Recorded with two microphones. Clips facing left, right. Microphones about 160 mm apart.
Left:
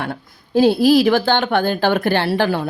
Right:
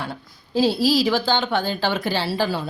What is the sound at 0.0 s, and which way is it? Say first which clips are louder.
A woman's voice: left 5 dB; 55° left (ahead or behind).